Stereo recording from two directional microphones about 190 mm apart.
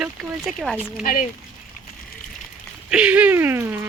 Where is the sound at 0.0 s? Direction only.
5° right (ahead or behind).